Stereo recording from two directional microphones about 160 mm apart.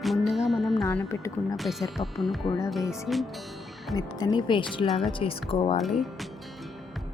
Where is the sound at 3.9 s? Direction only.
25° left (ahead or behind).